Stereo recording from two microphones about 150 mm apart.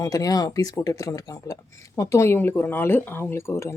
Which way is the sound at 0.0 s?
25° left (ahead or behind).